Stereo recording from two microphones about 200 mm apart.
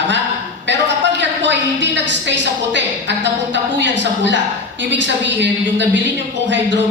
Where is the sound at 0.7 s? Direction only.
65° right (ahead or behind).